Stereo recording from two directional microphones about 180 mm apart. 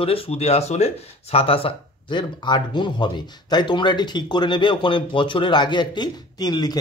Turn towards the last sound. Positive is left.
turn(degrees=20)  # may be behind; listen again after turning